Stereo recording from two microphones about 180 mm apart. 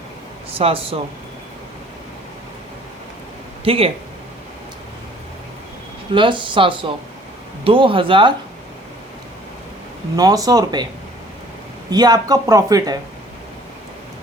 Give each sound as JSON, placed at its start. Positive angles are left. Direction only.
{"t": 0.5, "sound": "speech", "side_deg": -30}
{"t": 3.6, "sound": "speech", "side_deg": -30}
{"t": 6.1, "sound": "speech", "side_deg": -25}
{"t": 10.2, "sound": "speech", "side_deg": -20}
{"t": 11.9, "sound": "speech", "side_deg": -20}